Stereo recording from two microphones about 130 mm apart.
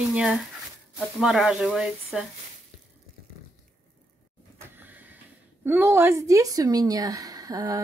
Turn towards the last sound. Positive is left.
turn(degrees=-25)  # may be behind; listen again after turning